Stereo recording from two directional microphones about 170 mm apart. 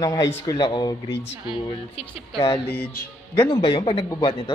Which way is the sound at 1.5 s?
30° left (ahead or behind).